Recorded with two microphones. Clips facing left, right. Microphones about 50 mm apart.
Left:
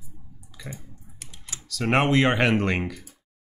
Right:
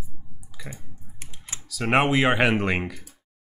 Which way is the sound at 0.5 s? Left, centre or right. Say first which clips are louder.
Even; centre.